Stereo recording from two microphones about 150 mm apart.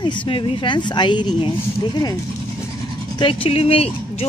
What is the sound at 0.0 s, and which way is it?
Speech, 35° left (ahead or behind).